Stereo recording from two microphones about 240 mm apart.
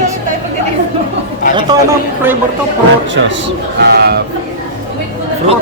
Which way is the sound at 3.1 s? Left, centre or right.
Right.